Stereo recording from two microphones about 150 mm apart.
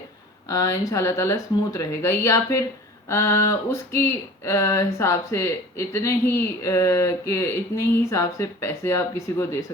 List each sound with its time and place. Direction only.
0.4 s speech: 20° left (ahead or behind)
3.1 s a sound: 15° left (ahead or behind)
4.4 s speech: 20° left (ahead or behind)